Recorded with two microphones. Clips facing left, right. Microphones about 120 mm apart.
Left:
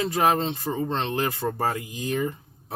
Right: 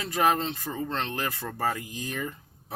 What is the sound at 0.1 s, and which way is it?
Speech, 25° left (ahead or behind).